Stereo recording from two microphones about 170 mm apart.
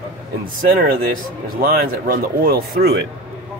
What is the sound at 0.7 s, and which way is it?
Speech, 55° right (ahead or behind).